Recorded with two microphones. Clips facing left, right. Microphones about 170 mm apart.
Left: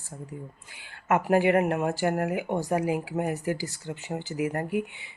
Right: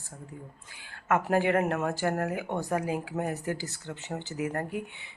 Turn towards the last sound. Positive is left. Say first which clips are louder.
# left 3 dB
turn(degrees=10)  # may be behind; listen again after turning